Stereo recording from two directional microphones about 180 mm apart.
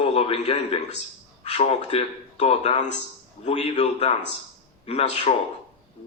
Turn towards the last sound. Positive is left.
turn(degrees=35)  # may be behind; listen again after turning